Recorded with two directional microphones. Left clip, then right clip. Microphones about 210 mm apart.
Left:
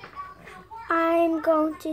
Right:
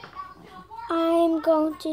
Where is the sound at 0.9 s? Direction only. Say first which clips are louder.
Even; 25° right (ahead or behind).